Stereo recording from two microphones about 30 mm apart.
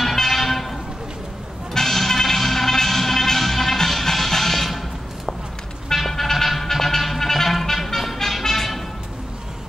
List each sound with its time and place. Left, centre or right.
0.0 s vehicle: centre
1.7 s music: centre
5.9 s music: centre